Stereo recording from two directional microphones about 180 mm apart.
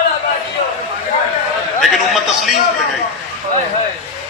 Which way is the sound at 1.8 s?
Centre (ahead or behind).